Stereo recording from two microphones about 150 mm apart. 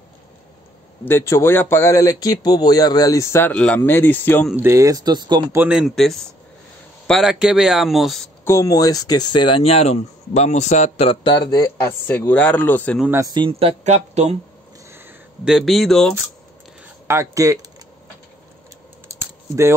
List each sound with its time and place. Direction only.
1.0 s speech: 15° left (ahead or behind)
4.6 s speech: 20° right (ahead or behind)
5.6 s speech: 5° right (ahead or behind)
8.5 s speech: 20° left (ahead or behind)
13.3 s speech: 35° right (ahead or behind)
14.9 s a sound: 15° right (ahead or behind)
15.4 s speech: centre (ahead or behind)
17.1 s speech: 20° right (ahead or behind)
19.0 s typing: 20° right (ahead or behind)